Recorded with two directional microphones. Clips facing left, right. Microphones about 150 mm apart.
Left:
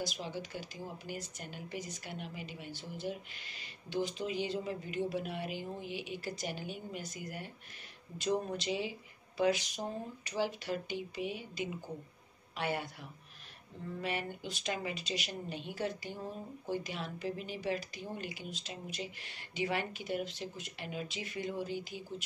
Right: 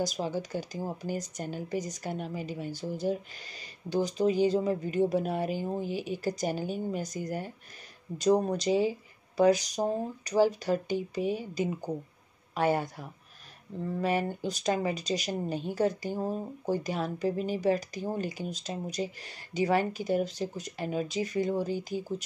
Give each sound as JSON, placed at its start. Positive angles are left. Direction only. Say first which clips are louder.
{"t": 0.0, "sound": "speech", "louder": "right 8 dB", "side_deg": -40}